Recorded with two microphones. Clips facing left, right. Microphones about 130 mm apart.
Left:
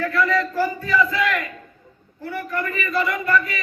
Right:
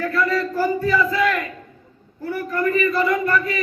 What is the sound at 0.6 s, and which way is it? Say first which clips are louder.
Battle cry: right 5 dB; 25° right (ahead or behind).